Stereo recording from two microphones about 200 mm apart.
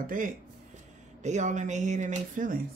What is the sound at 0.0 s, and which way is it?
Speech, 40° right (ahead or behind).